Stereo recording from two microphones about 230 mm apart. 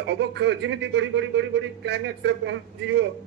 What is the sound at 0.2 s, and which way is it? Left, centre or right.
Speech, right.